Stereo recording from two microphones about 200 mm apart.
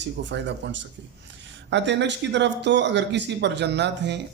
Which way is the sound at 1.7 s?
60° right (ahead or behind).